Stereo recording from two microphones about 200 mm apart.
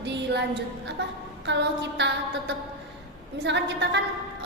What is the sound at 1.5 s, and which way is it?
Speech, 60° right (ahead or behind).